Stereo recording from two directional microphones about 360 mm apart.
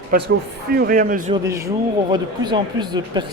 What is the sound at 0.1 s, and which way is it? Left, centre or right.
Speech, right.